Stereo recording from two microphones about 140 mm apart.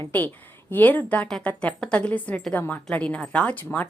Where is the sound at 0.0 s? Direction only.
15° left (ahead or behind).